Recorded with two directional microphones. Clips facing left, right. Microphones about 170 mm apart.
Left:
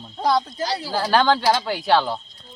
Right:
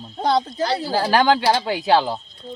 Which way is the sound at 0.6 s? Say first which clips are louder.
Right 4 dB; 60° right (ahead or behind).